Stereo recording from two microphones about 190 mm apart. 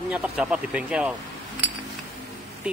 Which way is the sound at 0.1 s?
5° right (ahead or behind).